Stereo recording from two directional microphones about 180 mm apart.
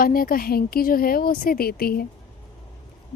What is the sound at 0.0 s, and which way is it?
A woman's voice, 55° left (ahead or behind).